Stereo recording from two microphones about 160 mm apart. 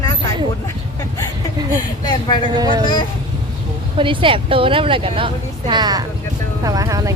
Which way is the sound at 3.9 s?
30° right (ahead or behind).